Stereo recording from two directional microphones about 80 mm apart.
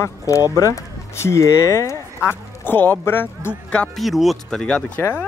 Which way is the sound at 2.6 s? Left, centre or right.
Left.